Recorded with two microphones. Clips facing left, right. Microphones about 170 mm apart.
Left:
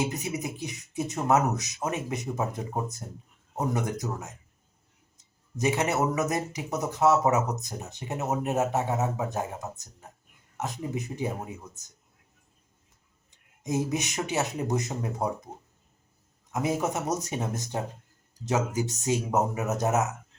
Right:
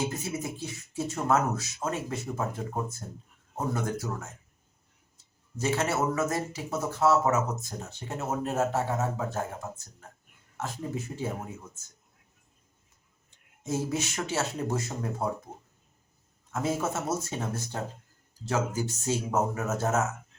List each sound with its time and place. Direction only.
0.0 s speech: 15° left (ahead or behind)
13.7 s speech: 15° left (ahead or behind)
16.5 s speech: 15° left (ahead or behind)